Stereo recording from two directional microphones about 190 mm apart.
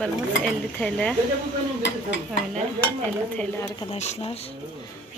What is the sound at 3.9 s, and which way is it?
Speech, 35° left (ahead or behind).